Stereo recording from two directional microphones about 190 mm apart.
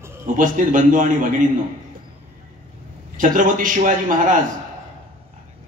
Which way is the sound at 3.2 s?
45° right (ahead or behind).